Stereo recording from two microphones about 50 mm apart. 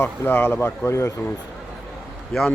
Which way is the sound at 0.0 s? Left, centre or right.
Left.